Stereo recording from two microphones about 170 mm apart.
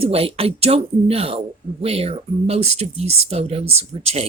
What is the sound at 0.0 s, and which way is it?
Speech, 35° right (ahead or behind).